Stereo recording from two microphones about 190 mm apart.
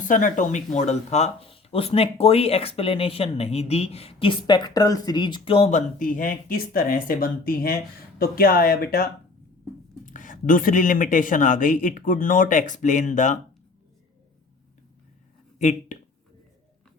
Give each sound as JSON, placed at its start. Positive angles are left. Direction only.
{"t": 0.0, "sound": "speech", "side_deg": 45}
{"t": 10.1, "sound": "speech", "side_deg": 45}
{"t": 15.5, "sound": "speech", "side_deg": 40}